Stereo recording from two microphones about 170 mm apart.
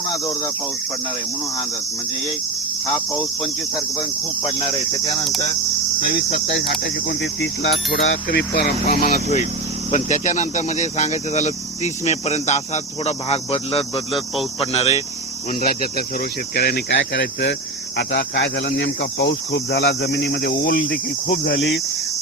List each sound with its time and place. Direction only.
0.1 s cricket: 20° left (ahead or behind)
4.4 s speech: 35° left (ahead or behind)
7.2 s insect: 85° left
8.0 s speech: 90° left; by 9.2 s 60° left (ahead or behind)
9.9 s speech: 45° left (ahead or behind)
15.6 s speech: 60° left (ahead or behind)
20.9 s cricket: 55° left (ahead or behind)